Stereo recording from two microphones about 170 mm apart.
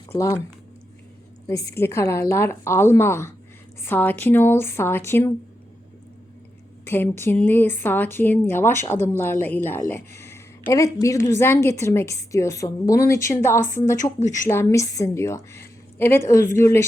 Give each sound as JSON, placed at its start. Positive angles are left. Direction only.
{"t": 0.1, "sound": "a woman's voice", "side_deg": 15}
{"t": 1.5, "sound": "a woman's voice", "side_deg": 20}
{"t": 6.8, "sound": "a woman's voice", "side_deg": 15}
{"t": 10.2, "sound": "a sound", "side_deg": 15}
{"t": 11.0, "sound": "a woman's voice", "side_deg": 20}